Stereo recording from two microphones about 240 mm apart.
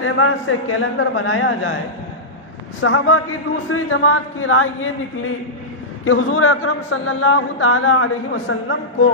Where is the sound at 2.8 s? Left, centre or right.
Left.